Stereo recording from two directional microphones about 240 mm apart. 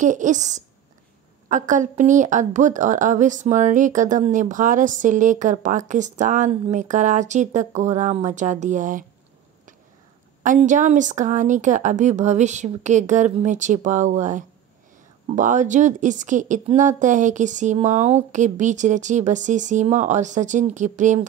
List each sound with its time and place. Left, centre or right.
0.0 s a woman's voice: right
10.4 s a woman's voice: right